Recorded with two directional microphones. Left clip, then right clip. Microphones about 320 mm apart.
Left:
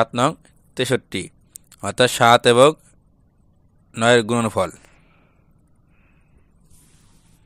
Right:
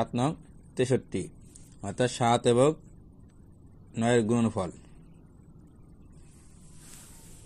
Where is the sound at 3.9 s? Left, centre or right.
Left.